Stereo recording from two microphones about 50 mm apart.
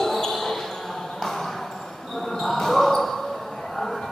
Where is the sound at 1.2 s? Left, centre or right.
Centre.